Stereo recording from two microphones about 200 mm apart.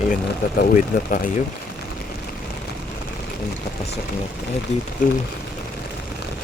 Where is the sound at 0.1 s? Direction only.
45° left (ahead or behind).